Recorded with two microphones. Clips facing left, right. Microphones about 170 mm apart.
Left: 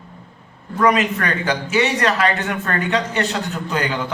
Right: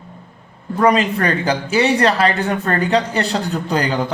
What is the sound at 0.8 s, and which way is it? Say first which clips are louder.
Speech: right 2 dB; 30° right (ahead or behind).